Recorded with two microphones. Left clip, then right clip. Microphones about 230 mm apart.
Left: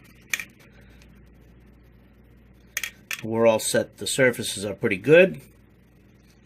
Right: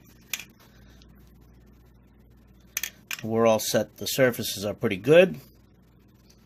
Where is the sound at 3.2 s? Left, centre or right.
Right.